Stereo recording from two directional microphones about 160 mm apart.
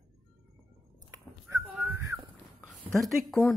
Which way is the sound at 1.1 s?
15° right (ahead or behind).